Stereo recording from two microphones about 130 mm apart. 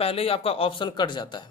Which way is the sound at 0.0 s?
45° left (ahead or behind).